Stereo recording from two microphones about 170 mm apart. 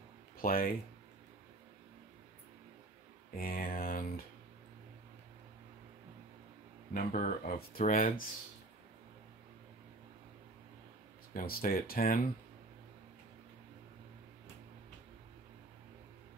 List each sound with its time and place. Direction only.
0.4 s speech: 60° left (ahead or behind)
3.3 s speech: 60° left (ahead or behind)
6.9 s speech: 55° left (ahead or behind)
11.3 s speech: 60° left (ahead or behind)